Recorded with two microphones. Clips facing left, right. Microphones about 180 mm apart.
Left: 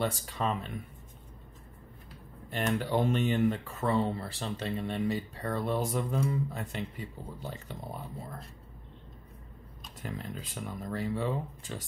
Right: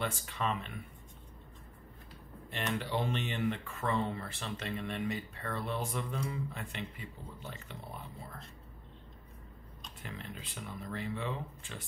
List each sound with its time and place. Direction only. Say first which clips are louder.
0.0 s speech: left 4 dB; 35° left (ahead or behind)
2.5 s speech: left 6 dB; 40° left (ahead or behind)
10.0 s speech: left 6 dB; 40° left (ahead or behind)